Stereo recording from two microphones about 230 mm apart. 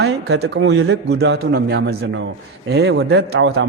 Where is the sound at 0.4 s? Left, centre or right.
Right.